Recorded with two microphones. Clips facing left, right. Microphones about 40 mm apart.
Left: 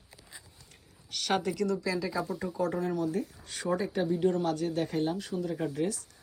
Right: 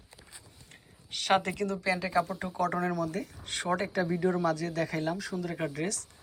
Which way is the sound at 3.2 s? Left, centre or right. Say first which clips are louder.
Right 1 dB; right.